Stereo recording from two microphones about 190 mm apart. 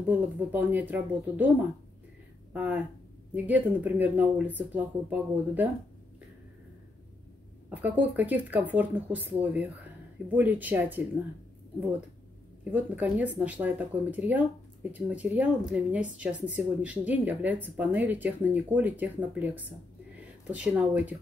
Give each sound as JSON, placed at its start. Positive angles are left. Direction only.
{"t": 0.0, "sound": "speech", "side_deg": -10}
{"t": 2.5, "sound": "speech", "side_deg": -10}
{"t": 7.7, "sound": "speech", "side_deg": -10}
{"t": 12.7, "sound": "speech", "side_deg": -10}